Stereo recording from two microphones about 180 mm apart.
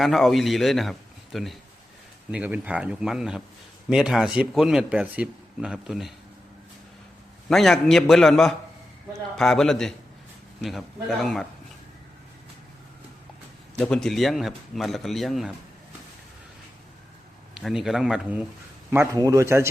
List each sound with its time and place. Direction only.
0.0 s speech: centre (ahead or behind)
7.5 s speech: centre (ahead or behind)
13.7 s speech: 5° left (ahead or behind)
17.5 s speech: centre (ahead or behind)
18.9 s speech: 15° right (ahead or behind)